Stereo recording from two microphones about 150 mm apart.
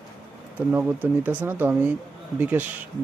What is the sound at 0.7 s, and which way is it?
Speech, 10° right (ahead or behind).